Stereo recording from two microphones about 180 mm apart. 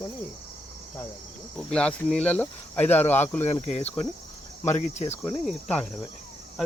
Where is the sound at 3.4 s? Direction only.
35° left (ahead or behind).